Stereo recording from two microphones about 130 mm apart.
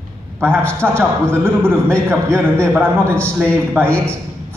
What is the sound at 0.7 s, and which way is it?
A man's voice, 20° right (ahead or behind).